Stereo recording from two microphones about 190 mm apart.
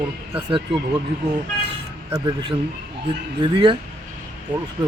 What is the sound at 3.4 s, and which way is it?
Speech, 25° right (ahead or behind).